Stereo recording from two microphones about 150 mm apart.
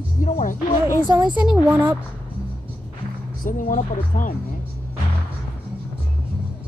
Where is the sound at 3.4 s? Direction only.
60° left (ahead or behind).